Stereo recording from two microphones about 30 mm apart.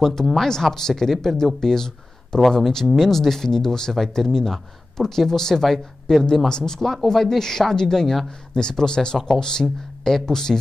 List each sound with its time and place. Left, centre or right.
0.0 s speech: centre